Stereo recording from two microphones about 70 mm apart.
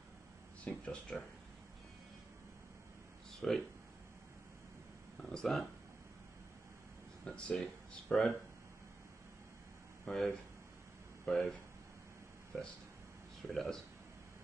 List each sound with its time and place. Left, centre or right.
0.7 s speech: centre
3.3 s a sound: centre
5.2 s speech: centre
7.2 s speech: centre
10.0 s speech: centre
12.5 s speech: centre